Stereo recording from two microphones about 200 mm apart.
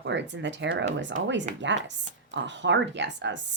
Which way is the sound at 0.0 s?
65° right (ahead or behind).